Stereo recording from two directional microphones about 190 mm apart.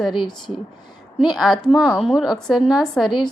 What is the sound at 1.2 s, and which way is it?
A woman's voice, centre (ahead or behind).